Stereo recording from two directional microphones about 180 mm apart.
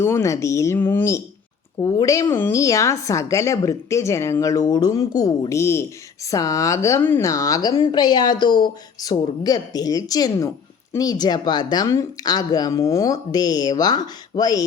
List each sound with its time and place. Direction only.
0.0 s a woman's voice: 15° left (ahead or behind)